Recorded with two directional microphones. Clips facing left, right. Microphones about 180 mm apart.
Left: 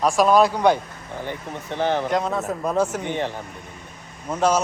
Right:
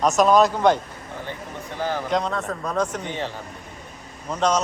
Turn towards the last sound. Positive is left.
turn(degrees=5)  # may be behind; listen again after turning